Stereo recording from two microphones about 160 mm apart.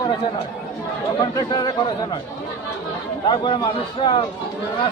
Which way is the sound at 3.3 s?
30° left (ahead or behind).